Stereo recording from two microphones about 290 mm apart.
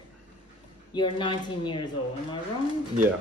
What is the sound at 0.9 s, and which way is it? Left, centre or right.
Speech, centre.